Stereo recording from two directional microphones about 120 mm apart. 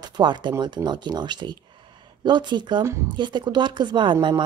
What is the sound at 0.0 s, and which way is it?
Speech, 35° right (ahead or behind).